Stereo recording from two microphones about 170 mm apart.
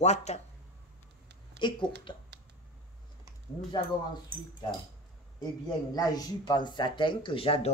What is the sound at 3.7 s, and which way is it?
Speech, 25° left (ahead or behind).